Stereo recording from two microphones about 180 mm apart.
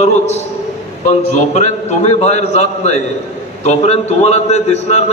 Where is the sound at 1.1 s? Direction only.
40° left (ahead or behind).